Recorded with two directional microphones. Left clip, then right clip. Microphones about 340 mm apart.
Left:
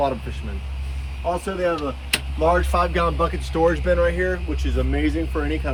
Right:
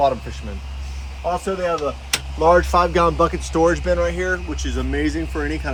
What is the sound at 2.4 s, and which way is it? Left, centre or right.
Speech, centre.